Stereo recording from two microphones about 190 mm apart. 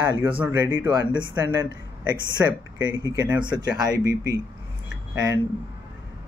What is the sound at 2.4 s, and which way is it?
Speech, 10° right (ahead or behind).